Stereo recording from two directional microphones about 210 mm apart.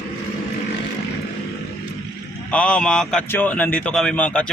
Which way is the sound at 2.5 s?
5° left (ahead or behind).